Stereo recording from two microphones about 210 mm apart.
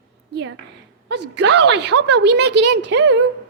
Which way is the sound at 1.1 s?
55° right (ahead or behind).